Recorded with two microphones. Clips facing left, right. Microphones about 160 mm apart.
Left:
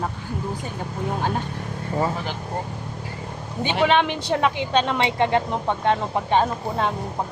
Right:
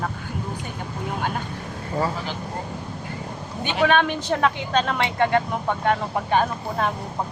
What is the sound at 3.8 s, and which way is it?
Speech, 20° left (ahead or behind).